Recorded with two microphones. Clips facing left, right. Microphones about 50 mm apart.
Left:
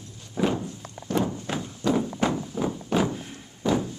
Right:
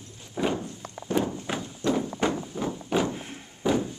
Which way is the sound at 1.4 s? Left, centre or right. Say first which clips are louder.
Left 1 dB; centre.